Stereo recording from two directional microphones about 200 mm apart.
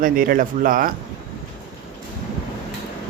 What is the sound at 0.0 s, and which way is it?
Speech, 45° right (ahead or behind).